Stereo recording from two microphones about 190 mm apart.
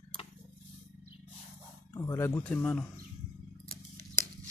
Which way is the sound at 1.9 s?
15° left (ahead or behind).